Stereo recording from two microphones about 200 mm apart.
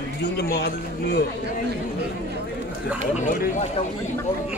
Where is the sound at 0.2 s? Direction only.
55° left (ahead or behind).